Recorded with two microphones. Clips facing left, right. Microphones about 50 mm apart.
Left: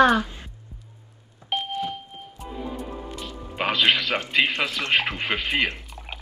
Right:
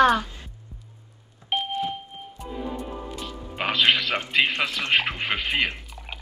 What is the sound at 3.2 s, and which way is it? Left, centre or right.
Music, centre.